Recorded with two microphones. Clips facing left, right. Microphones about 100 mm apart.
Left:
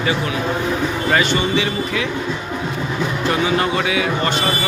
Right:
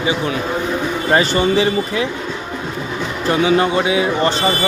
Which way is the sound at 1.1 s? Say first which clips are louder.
Right 4 dB; 35° right (ahead or behind).